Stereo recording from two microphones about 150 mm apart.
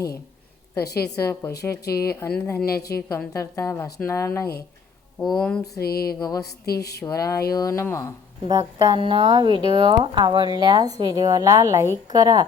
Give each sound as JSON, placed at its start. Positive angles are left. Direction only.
{"t": 1.2, "sound": "speech", "side_deg": 15}
{"t": 1.7, "sound": "speech", "side_deg": 90}
{"t": 2.1, "sound": "speech", "side_deg": 15}
{"t": 2.7, "sound": "speech", "side_deg": 90}
{"t": 3.3, "sound": "a woman's voice", "side_deg": 20}
{"t": 5.4, "sound": "speech", "side_deg": 5}
{"t": 5.8, "sound": "speech", "side_deg": 90}
{"t": 6.1, "sound": "a woman's voice", "side_deg": 25}
{"t": 6.4, "sound": "speech", "side_deg": 90}
{"t": 7.0, "sound": "a woman's voice", "side_deg": 20}
{"t": 8.4, "sound": "speech", "side_deg": -25}